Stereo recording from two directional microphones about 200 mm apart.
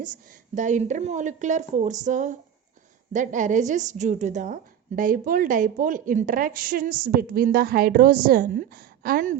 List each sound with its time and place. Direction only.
0.5 s a woman's voice: 40° right (ahead or behind)